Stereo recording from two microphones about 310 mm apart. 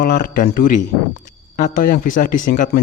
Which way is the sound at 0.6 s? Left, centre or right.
Left.